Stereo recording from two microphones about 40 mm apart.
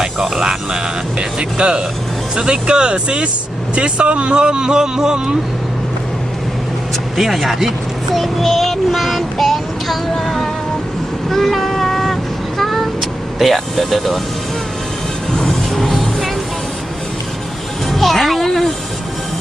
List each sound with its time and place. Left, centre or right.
0.0 s speech: centre
7.2 s speech: centre
8.1 s child singing: centre
11.3 s vehicle: centre
15.4 s music: centre
17.9 s a sound: centre